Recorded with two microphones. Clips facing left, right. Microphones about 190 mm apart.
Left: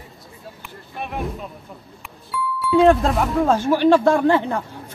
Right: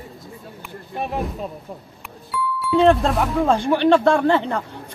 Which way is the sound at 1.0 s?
35° right (ahead or behind).